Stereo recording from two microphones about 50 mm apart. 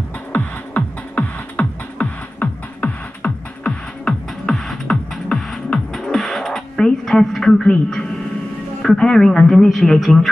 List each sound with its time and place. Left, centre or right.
0.3 s music: left
4.0 s music: centre
8.8 s speech: centre